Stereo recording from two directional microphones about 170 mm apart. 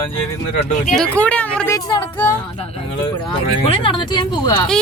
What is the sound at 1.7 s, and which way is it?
Speech, 20° left (ahead or behind).